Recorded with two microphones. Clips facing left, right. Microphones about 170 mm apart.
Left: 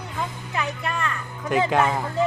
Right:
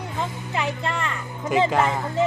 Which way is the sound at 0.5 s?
25° right (ahead or behind).